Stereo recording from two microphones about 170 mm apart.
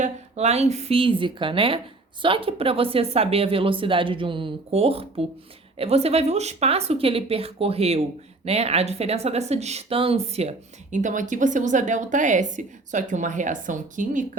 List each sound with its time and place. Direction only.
0.0 s speech: 40° right (ahead or behind)
10.9 s a woman's voice: 50° right (ahead or behind)